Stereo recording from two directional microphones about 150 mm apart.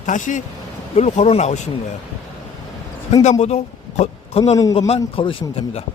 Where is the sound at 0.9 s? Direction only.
45° left (ahead or behind).